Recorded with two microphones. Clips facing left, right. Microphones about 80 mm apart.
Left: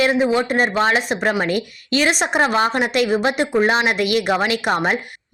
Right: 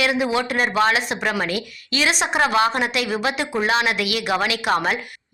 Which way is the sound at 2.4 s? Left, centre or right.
Left.